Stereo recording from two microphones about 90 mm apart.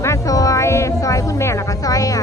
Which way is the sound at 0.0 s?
35° left (ahead or behind).